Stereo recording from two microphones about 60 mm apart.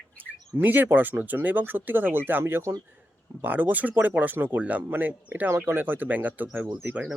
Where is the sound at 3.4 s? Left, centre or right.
Right.